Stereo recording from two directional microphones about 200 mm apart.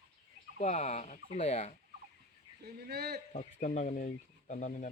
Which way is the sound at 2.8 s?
55° right (ahead or behind).